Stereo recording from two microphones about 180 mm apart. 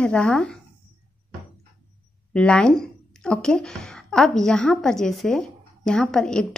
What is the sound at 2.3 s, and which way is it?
A woman's voice, 5° left (ahead or behind).